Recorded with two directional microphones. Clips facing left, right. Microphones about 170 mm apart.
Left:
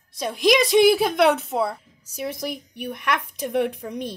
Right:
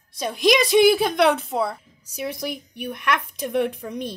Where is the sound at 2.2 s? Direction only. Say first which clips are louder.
Even; 45° left (ahead or behind).